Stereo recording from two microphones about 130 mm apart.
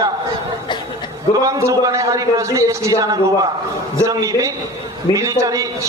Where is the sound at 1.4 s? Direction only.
25° right (ahead or behind).